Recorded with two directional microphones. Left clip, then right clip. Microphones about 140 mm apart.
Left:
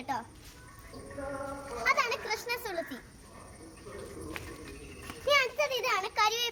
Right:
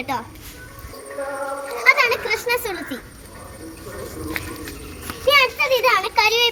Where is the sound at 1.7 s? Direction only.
15° left (ahead or behind).